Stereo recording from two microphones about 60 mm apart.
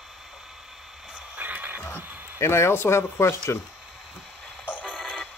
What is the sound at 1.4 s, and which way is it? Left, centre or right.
Music, right.